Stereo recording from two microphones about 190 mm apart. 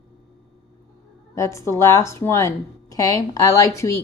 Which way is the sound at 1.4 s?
15° left (ahead or behind).